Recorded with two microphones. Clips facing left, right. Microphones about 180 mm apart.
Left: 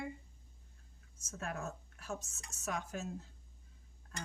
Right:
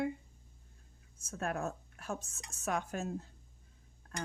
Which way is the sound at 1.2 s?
55° right (ahead or behind).